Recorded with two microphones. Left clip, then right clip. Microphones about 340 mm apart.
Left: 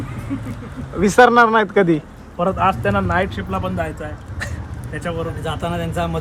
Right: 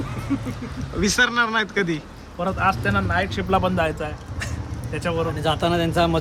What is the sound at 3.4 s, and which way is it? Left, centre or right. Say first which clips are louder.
Speech: right 3 dB; right.